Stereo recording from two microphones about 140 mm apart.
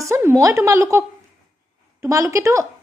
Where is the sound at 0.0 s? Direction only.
20° right (ahead or behind).